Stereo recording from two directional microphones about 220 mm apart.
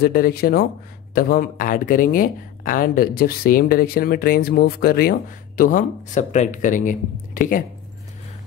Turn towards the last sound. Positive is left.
turn(degrees=40)  # may be behind; listen again after turning